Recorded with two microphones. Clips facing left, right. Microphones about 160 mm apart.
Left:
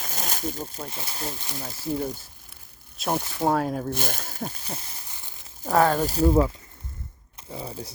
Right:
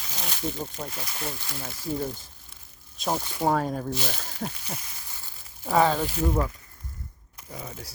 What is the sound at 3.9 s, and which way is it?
Speech, 50° left (ahead or behind).